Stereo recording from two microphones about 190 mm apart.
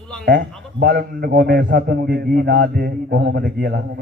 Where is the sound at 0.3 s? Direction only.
60° right (ahead or behind).